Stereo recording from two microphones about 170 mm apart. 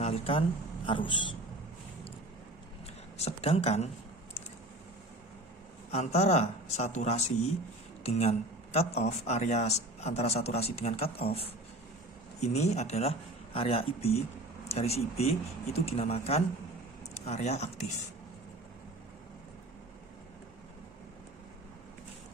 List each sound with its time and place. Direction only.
0.0 s a sound: 35° left (ahead or behind)
0.9 s speech: 30° left (ahead or behind)
3.2 s speech: 40° left (ahead or behind)
5.9 s speech: 40° left (ahead or behind)